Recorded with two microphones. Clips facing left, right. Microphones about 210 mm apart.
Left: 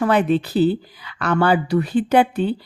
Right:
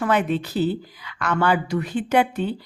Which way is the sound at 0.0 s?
35° left (ahead or behind).